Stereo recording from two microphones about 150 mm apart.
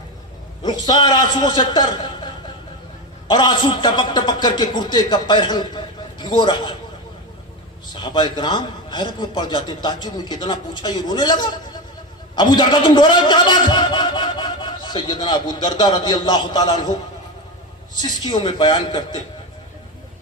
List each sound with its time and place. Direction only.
0.6 s a man's voice: 30° left (ahead or behind)
7.9 s a man's voice: 30° left (ahead or behind)
18.2 s a man's voice: 30° left (ahead or behind)